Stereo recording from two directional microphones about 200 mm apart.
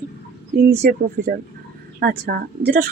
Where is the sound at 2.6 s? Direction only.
50° right (ahead or behind).